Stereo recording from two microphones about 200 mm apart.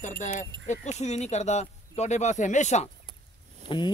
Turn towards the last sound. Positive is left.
turn(degrees=25)  # may be behind; listen again after turning